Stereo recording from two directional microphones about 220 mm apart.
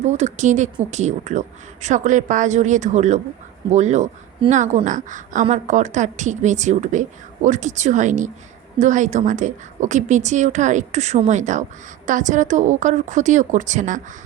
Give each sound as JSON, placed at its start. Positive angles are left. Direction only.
{"t": 0.0, "sound": "speech", "side_deg": -30}